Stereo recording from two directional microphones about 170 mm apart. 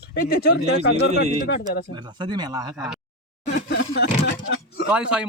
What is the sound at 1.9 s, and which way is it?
Speech, 25° right (ahead or behind).